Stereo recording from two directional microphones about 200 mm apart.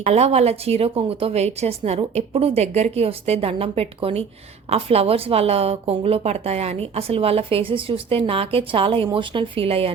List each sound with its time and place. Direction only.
0.0 s a woman's voice: 30° right (ahead or behind)